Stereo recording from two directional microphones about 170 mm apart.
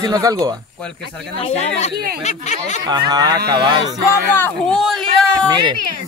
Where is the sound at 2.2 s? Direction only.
40° left (ahead or behind).